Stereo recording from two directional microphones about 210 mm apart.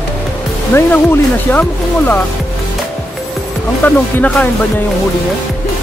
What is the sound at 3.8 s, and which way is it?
Speech, 5° left (ahead or behind).